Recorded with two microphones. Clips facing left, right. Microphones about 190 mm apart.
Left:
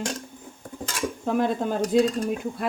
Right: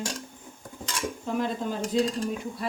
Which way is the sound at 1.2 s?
55° left (ahead or behind).